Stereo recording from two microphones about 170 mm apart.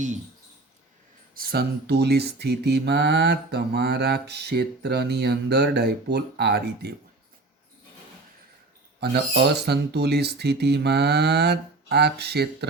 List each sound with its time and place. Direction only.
1.3 s mantra: 60° right (ahead or behind)
9.0 s mantra: 75° right (ahead or behind)